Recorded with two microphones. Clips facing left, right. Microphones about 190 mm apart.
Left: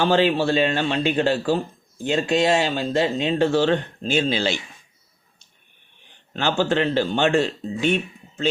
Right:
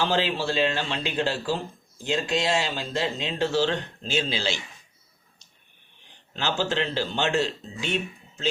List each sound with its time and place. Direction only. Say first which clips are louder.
0.0 s speech: left 7 dB; 60° left (ahead or behind)
6.3 s speech: left 6 dB; 55° left (ahead or behind)